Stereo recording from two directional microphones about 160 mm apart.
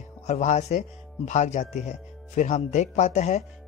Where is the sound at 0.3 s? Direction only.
45° left (ahead or behind).